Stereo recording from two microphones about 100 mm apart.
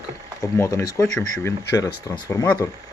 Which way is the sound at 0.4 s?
30° left (ahead or behind).